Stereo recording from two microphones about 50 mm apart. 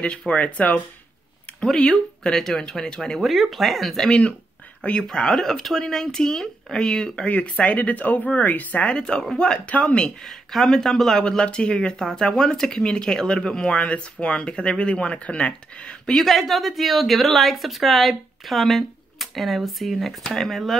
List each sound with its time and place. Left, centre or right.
0.3 s speech: left
1.6 s speech: centre
3.2 s a woman's voice: centre
4.1 s speech: left
5.0 s speech: centre
7.2 s speech: left
8.9 s speech: centre
10.2 s speech: centre
11.2 s speech: centre
15.8 s a woman's voice: centre